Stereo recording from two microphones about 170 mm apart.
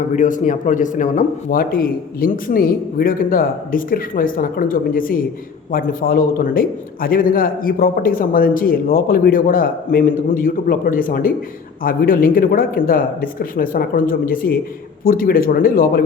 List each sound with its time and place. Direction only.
0.1 s a man's voice: 50° left (ahead or behind)